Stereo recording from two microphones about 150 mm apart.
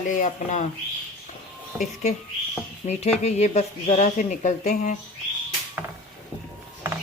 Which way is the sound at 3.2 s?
50° left (ahead or behind).